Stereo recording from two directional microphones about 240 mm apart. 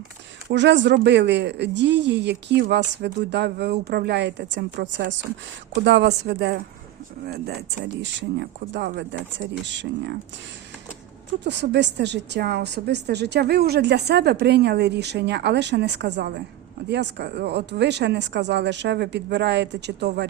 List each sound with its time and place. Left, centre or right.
0.4 s a woman's voice: right
11.3 s a woman's voice: right